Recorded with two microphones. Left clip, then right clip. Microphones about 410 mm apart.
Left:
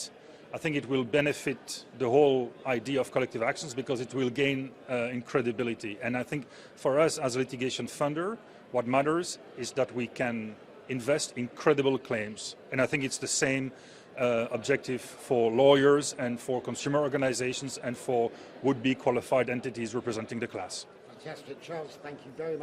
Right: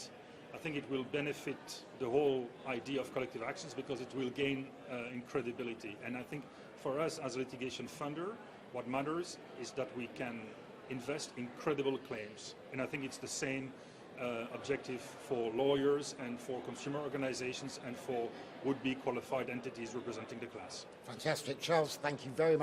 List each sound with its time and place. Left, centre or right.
0.5 s a man's voice: left
21.2 s a man's voice: right